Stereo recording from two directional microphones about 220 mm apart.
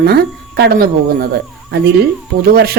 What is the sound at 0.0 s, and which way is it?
A woman's voice, 45° right (ahead or behind).